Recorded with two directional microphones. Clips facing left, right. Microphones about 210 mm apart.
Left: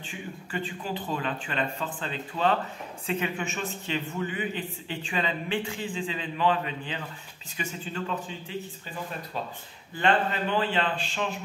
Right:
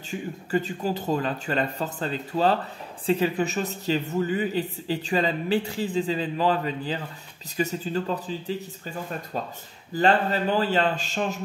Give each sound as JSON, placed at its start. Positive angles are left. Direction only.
{"t": 0.1, "sound": "speech", "side_deg": -40}
{"t": 9.9, "sound": "speech", "side_deg": -35}